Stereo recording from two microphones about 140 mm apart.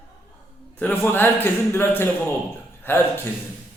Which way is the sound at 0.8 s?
15° left (ahead or behind).